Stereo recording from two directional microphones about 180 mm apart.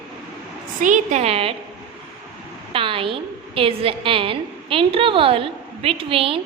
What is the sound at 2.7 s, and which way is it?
A woman's voice, 30° right (ahead or behind).